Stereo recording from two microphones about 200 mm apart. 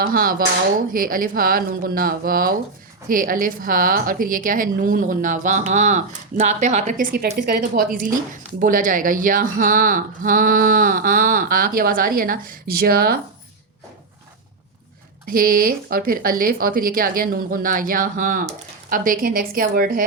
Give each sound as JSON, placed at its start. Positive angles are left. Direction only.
{"t": 0.0, "sound": "a woman's voice", "side_deg": -45}
{"t": 15.3, "sound": "speech", "side_deg": -45}